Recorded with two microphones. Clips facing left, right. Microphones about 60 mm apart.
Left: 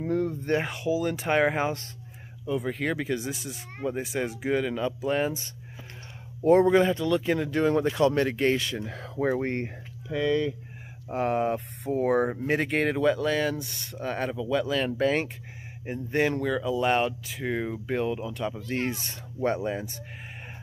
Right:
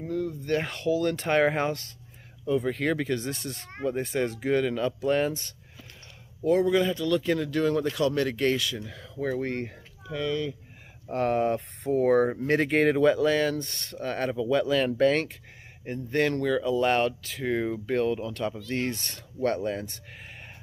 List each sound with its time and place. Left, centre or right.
0.0 s a sound: left
0.5 s speech: centre
6.4 s speech: left; by 10.3 s centre
11.1 s speech: centre